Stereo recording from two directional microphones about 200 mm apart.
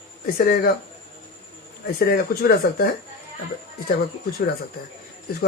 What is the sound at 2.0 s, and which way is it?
Speech, 50° left (ahead or behind).